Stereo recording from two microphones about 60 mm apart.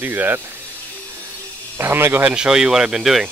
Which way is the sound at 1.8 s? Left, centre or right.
Right.